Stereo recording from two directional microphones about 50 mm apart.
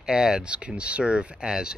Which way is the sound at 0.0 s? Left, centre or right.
Centre.